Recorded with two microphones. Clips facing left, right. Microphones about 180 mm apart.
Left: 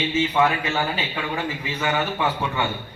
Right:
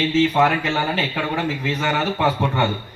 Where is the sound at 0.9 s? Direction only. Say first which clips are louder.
Right 4 dB; 70° right (ahead or behind).